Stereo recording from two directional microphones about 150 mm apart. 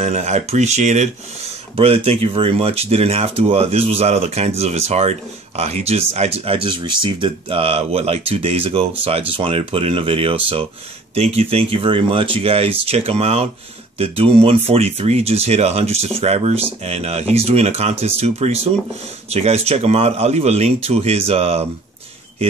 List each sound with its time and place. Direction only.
0.0 s speech: 50° right (ahead or behind)
1.8 s speech: 40° right (ahead or behind)